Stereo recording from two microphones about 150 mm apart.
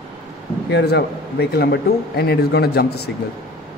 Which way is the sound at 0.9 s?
90° left.